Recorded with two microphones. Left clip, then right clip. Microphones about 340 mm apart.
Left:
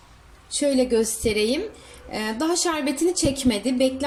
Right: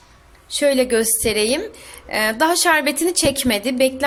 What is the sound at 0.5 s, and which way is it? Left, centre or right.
A woman's voice, right.